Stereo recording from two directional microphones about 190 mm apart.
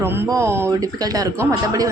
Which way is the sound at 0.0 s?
10° right (ahead or behind).